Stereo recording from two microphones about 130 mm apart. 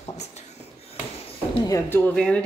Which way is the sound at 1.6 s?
20° left (ahead or behind).